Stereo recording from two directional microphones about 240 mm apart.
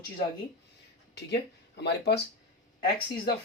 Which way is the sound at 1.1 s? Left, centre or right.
Left.